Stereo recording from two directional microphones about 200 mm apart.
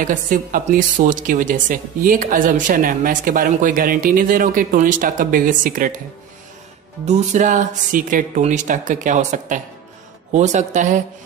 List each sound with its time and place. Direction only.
0.0 s a woman's voice: 40° right (ahead or behind)
7.1 s speech: 35° right (ahead or behind)